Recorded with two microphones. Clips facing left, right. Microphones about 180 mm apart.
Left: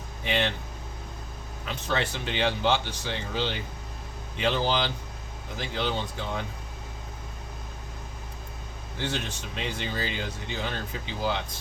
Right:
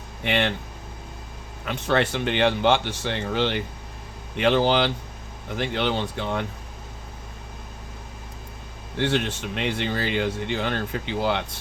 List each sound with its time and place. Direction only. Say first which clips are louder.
0.3 s speech: right 4 dB; 65° right (ahead or behind)
1.6 s speech: right 7 dB; 60° right (ahead or behind)
9.0 s speech: right 8 dB; 70° right (ahead or behind)